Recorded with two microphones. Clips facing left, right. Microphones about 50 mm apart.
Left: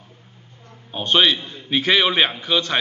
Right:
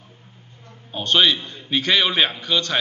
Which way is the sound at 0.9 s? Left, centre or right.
Centre.